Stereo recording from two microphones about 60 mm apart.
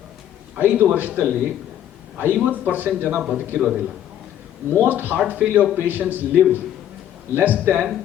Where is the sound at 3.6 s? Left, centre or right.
Centre.